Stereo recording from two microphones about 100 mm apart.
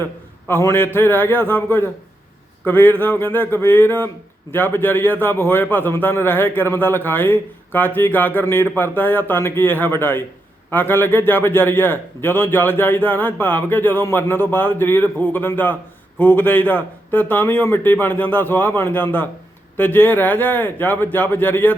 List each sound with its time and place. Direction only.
0.0 s a man's voice: 25° left (ahead or behind)